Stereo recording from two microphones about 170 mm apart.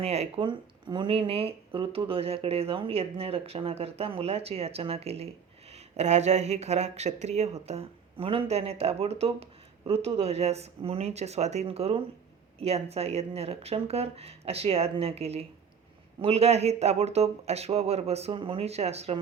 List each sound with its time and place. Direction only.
0.0 s speech: 35° right (ahead or behind)